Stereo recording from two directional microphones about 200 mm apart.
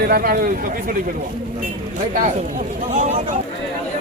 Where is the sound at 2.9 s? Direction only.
40° right (ahead or behind).